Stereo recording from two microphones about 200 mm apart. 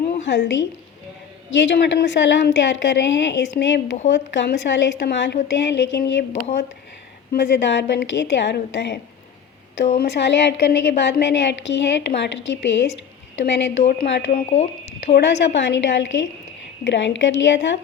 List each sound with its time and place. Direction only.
0.3 s a woman's voice: 65° left (ahead or behind)
7.3 s a woman's voice: 60° left (ahead or behind)
10.0 s a woman's voice: 55° left (ahead or behind)
14.3 s speech: 35° left (ahead or behind)
15.0 s a woman's voice: 60° left (ahead or behind)